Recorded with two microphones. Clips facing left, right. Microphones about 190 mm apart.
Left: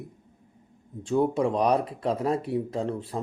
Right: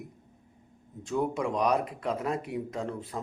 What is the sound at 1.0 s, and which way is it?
Speech, 30° left (ahead or behind).